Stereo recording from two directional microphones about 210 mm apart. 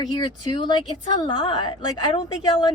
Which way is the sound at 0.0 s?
20° left (ahead or behind).